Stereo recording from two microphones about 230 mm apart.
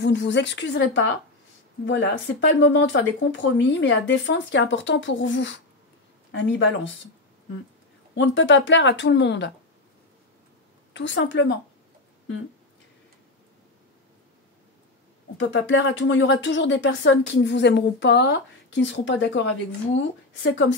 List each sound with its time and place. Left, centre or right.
0.0 s speech: left
8.1 s speech: left
10.9 s speech: left
15.3 s speech: left